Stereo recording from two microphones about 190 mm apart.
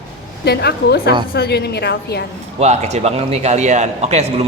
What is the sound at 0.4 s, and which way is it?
A woman's voice, 60° left (ahead or behind).